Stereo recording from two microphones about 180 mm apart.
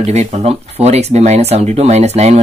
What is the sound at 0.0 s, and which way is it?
Speech, 35° right (ahead or behind).